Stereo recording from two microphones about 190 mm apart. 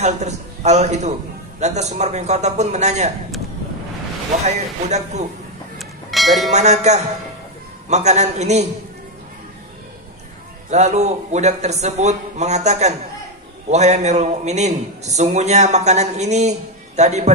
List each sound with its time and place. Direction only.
0.0 s a man's voice: 35° right (ahead or behind)
4.5 s a man's voice: 35° right (ahead or behind)
5.8 s a sound: centre (ahead or behind)
6.5 s a man's voice: 35° right (ahead or behind)
10.7 s a man's voice: 35° right (ahead or behind)